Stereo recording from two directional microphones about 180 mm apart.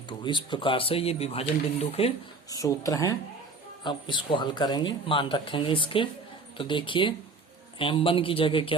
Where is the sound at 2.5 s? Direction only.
20° left (ahead or behind).